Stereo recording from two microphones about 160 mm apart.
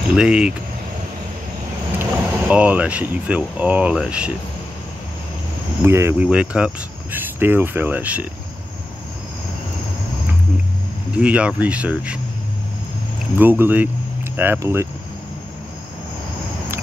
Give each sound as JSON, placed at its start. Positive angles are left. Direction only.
{"t": 0.1, "sound": "speech", "side_deg": -5}
{"t": 2.0, "sound": "speech", "side_deg": -10}
{"t": 5.9, "sound": "speech", "side_deg": -15}
{"t": 11.1, "sound": "speech", "side_deg": -5}
{"t": 13.4, "sound": "speech", "side_deg": -10}